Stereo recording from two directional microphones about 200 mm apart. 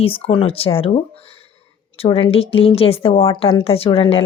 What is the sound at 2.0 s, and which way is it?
Speech, 30° left (ahead or behind).